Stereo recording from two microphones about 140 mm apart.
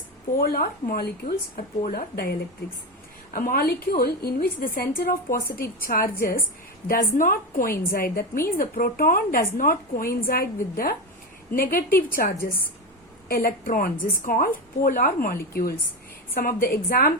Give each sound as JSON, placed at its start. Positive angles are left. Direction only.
{"t": 0.3, "sound": "a woman's voice", "side_deg": 90}
{"t": 3.3, "sound": "a woman's voice", "side_deg": 85}